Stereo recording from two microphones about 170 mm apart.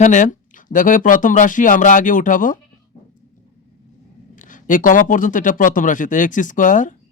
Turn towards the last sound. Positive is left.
turn(degrees=50)  # may be behind; listen again after turning